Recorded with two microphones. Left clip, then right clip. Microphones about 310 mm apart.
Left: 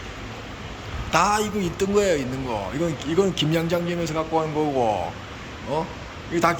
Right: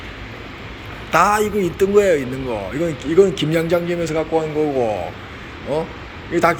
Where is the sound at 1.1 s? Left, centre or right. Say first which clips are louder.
Right 5 dB; centre.